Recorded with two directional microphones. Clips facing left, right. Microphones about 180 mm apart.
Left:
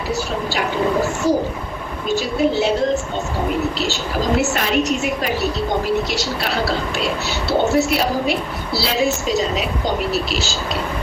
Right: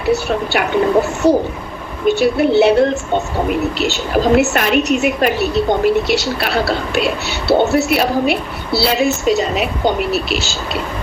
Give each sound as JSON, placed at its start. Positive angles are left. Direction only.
{"t": 0.1, "sound": "a woman's voice", "side_deg": -65}